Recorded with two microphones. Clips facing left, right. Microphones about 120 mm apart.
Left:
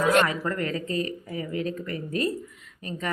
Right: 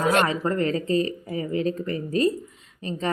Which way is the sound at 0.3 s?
25° right (ahead or behind).